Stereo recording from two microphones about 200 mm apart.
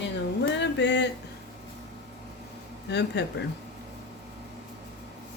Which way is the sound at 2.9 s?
55° left (ahead or behind).